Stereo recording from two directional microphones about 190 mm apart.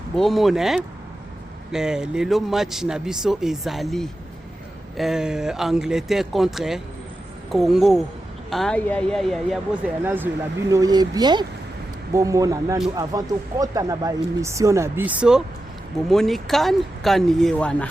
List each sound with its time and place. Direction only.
0.2 s speech: centre (ahead or behind)
10.0 s speech: 10° right (ahead or behind); by 17.8 s 5° left (ahead or behind)